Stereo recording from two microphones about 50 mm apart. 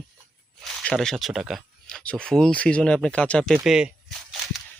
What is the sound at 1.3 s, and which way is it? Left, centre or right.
Speech, centre.